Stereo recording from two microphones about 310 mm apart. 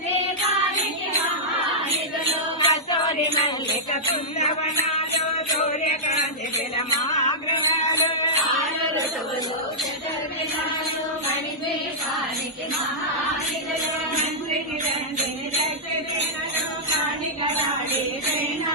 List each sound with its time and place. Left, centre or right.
2.6 s music: centre
4.1 s jingle bell: left
5.5 s music: left